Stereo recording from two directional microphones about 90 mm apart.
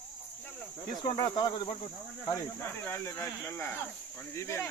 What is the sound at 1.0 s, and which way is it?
Speech, 55° left (ahead or behind).